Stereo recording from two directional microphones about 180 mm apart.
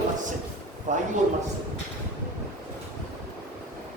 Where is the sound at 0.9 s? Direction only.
45° right (ahead or behind).